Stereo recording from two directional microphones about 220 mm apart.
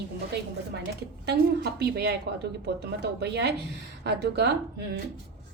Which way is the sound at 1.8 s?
45° right (ahead or behind).